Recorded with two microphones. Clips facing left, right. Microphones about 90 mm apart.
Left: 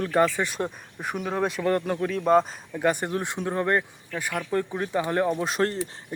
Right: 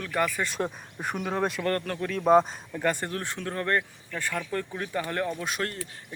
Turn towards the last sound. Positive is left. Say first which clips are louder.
# left 7 dB
turn(degrees=30)  # may be behind; listen again after turning